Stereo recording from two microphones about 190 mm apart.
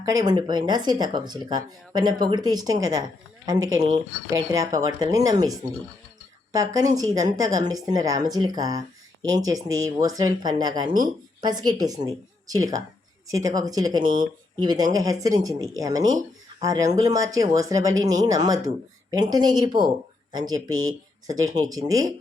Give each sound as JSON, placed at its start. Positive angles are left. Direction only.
{"t": 0.0, "sound": "speech", "side_deg": -20}